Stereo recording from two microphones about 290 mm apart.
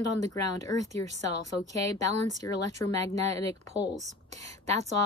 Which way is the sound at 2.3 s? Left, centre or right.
Centre.